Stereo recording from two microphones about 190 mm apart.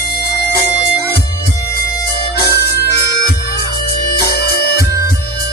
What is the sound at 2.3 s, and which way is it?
Music, 60° left (ahead or behind).